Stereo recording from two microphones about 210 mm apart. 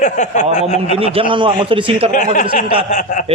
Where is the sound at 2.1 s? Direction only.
40° left (ahead or behind).